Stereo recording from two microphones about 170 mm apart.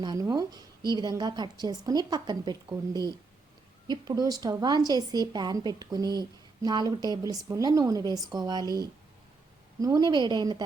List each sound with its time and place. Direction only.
0.0 s a woman's voice: 25° right (ahead or behind)